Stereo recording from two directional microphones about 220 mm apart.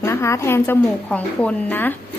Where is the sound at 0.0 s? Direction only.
10° left (ahead or behind).